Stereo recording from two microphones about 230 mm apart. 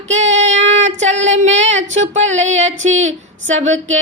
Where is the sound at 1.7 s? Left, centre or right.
Right.